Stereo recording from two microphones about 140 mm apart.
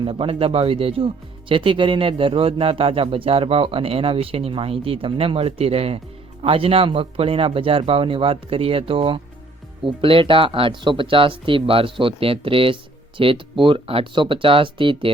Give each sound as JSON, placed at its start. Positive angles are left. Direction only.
{"t": 0.0, "sound": "speech", "side_deg": -40}